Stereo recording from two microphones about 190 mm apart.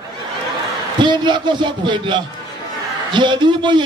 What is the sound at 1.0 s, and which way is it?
A man's voice, 25° right (ahead or behind).